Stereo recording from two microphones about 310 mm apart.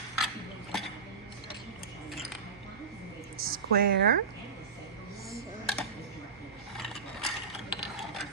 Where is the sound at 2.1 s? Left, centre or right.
Centre.